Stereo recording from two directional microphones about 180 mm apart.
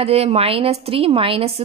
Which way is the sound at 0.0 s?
35° right (ahead or behind).